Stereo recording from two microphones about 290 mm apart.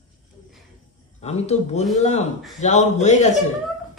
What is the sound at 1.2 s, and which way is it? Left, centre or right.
Speech, left.